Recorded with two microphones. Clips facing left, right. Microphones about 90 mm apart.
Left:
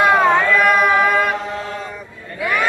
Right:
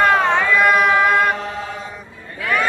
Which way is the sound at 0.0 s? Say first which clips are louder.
Left 2 dB; 5° left (ahead or behind).